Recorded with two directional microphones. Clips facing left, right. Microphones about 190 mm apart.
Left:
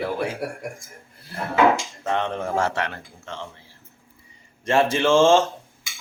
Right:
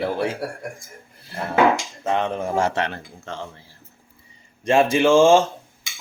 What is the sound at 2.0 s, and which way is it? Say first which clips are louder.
Speech: right 2 dB; 10° right (ahead or behind).